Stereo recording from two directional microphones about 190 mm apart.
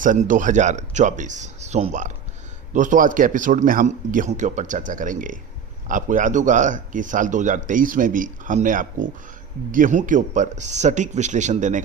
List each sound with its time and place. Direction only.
0.0 s speech: 45° right (ahead or behind)